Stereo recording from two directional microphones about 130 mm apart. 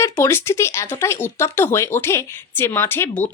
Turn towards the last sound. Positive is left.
turn(degrees=15)  # may be behind; listen again after turning